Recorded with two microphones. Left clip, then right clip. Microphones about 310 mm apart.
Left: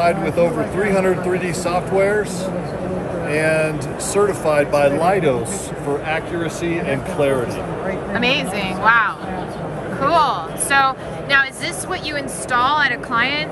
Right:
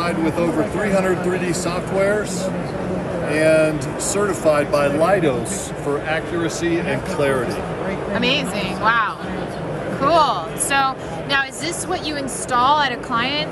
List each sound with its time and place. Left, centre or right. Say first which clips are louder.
0.0 s speech: left 4 dB; left
8.1 s a woman's voice: left 1 dB; centre